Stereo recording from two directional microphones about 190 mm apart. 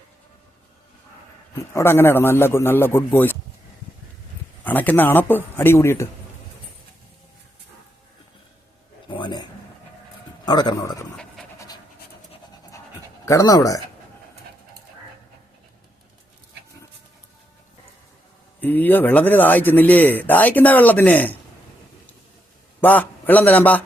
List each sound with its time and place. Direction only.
1.7 s speech: 15° left (ahead or behind)
4.6 s speech: 10° left (ahead or behind)
9.0 s a sound: 25° left (ahead or behind)
13.2 s speech: 20° left (ahead or behind)
18.6 s speech: 10° left (ahead or behind)
22.8 s a man's voice: 10° left (ahead or behind)